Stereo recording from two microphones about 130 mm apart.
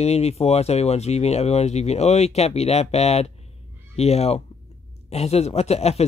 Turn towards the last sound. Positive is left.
turn(degrees=55)  # may be behind; listen again after turning